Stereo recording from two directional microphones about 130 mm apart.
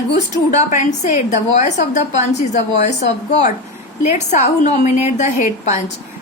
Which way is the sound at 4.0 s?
60° left (ahead or behind).